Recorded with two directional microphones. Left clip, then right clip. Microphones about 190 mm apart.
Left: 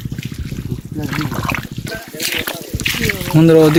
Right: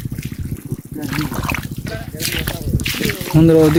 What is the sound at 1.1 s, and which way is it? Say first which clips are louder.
Speech: left 1 dB; 40° right (ahead or behind).